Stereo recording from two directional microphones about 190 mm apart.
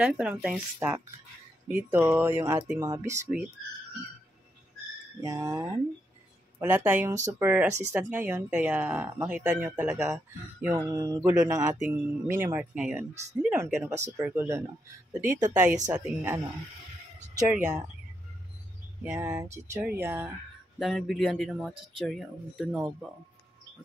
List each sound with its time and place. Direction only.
0.0 s speech: 5° right (ahead or behind)
5.2 s speech: 15° right (ahead or behind)
17.5 s speech: 10° right (ahead or behind)
19.0 s speech: 15° right (ahead or behind)
20.8 s speech: centre (ahead or behind)